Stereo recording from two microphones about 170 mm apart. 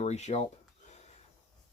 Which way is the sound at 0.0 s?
40° left (ahead or behind).